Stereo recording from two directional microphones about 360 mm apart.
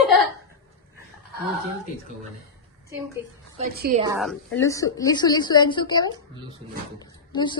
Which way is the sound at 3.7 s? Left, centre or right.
Right.